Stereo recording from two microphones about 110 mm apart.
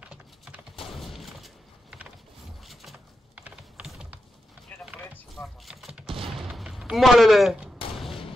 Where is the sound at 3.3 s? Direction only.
15° right (ahead or behind).